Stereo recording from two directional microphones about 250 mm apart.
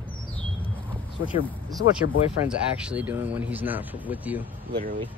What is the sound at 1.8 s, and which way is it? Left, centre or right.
Speech, left.